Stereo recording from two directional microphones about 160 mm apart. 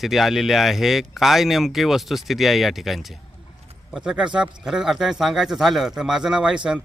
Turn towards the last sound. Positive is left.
turn(degrees=-5)  # may be behind; listen again after turning